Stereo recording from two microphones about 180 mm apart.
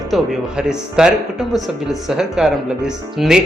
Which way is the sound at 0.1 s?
5° right (ahead or behind).